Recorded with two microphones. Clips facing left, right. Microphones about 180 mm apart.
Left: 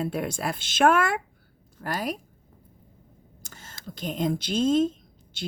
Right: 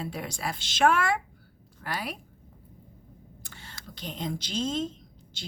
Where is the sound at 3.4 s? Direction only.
45° left (ahead or behind).